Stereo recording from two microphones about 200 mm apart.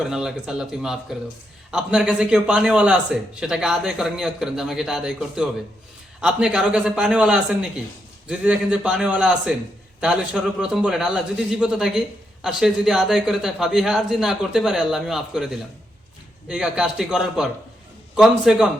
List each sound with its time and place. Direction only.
0.0 s a man's voice: centre (ahead or behind)